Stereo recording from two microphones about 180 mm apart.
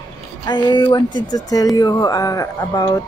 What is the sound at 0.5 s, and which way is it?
Speech, 25° left (ahead or behind).